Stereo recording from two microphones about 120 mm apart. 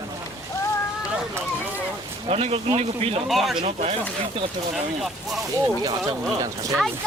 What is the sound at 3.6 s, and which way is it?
Speech, 65° right (ahead or behind).